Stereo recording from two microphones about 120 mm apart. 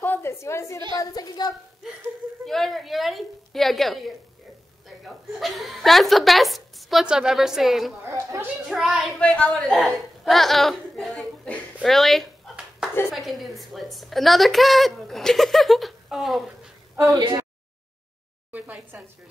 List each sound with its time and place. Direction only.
0.0 s a sound: 20° left (ahead or behind)
0.9 s a woman's voice: 35° left (ahead or behind)
2.4 s a woman's voice: centre (ahead or behind)
8.1 s speech: 25° right (ahead or behind)
8.6 s a woman's voice: centre (ahead or behind)
9.2 s a woman's voice: 10° left (ahead or behind)
17.2 s a sound: 35° right (ahead or behind)
18.5 s a woman's voice: 15° right (ahead or behind)